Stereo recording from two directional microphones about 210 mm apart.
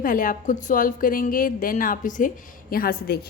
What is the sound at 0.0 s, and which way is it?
A woman's voice, 40° left (ahead or behind).